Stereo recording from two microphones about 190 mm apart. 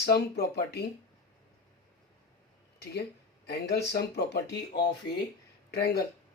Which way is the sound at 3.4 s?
60° left (ahead or behind).